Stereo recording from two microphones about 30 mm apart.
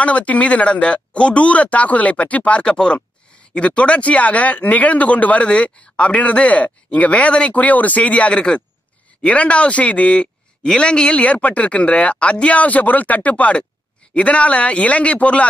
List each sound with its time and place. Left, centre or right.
0.0 s speech: left
2.6 s speech: left
3.5 s speech: left
5.5 s speech: left
11.4 s speech: left
13.3 s speech: left